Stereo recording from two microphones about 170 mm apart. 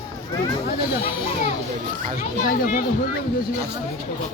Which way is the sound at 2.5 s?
55° left (ahead or behind).